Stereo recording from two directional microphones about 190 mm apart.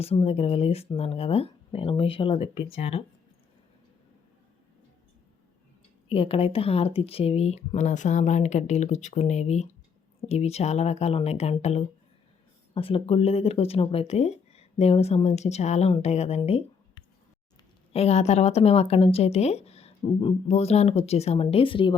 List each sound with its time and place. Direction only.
0.0 s a woman's voice: 30° left (ahead or behind)
6.1 s a woman's voice: 30° left (ahead or behind)
16.4 s a sound: 30° left (ahead or behind)
17.9 s a woman's voice: 35° left (ahead or behind)